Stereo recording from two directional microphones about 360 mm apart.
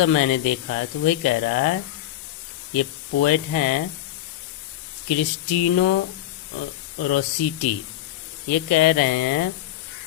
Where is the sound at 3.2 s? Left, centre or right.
Left.